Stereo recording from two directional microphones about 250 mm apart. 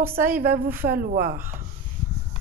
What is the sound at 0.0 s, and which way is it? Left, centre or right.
Speech, centre.